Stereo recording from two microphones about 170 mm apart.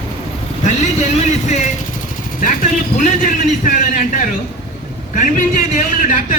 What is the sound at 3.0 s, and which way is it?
A man's voice, 50° left (ahead or behind).